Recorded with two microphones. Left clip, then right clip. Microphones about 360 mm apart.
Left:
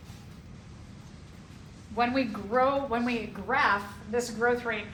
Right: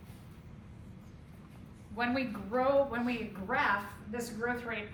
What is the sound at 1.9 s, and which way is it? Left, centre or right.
A woman's voice, centre.